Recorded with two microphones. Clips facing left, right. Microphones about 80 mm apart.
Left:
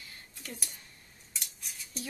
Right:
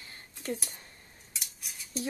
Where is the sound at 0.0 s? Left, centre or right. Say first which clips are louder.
Right 7 dB; right.